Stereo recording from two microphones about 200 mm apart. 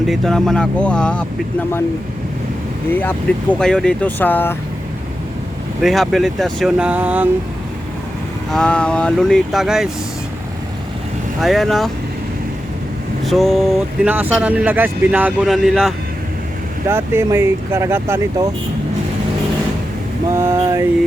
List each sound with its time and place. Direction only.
0.1 s speech: centre (ahead or behind)
2.9 s speech: 10° left (ahead or behind)
5.8 s speech: centre (ahead or behind)
8.4 s speech: 5° left (ahead or behind)
11.3 s speech: centre (ahead or behind)
13.2 s speech: centre (ahead or behind)
16.9 s speech: 10° right (ahead or behind)
20.3 s speech: 15° right (ahead or behind)